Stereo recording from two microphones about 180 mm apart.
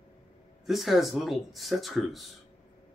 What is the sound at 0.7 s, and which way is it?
Speech, centre (ahead or behind).